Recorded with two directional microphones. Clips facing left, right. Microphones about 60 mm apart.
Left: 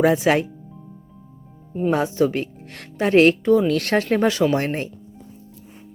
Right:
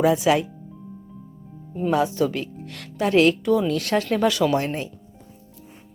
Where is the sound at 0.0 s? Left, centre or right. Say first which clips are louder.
Left 1 dB; left.